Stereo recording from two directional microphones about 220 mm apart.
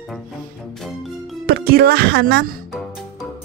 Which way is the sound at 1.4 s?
45° right (ahead or behind).